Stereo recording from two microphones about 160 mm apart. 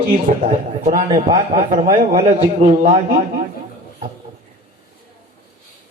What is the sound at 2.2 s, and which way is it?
A man's voice, 45° right (ahead or behind).